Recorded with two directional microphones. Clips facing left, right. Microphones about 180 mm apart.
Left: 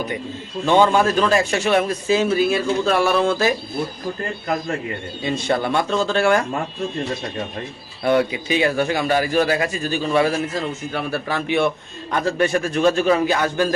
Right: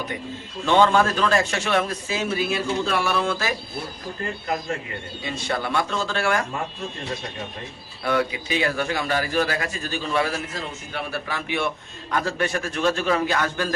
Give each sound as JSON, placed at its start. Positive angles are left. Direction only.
{"t": 0.6, "sound": "a man's voice", "side_deg": 10}
{"t": 2.3, "sound": "speech", "side_deg": 45}
{"t": 5.2, "sound": "a man's voice", "side_deg": 25}
{"t": 8.0, "sound": "a man's voice", "side_deg": 25}
{"t": 10.9, "sound": "speech", "side_deg": 35}
{"t": 12.1, "sound": "a man's voice", "side_deg": 20}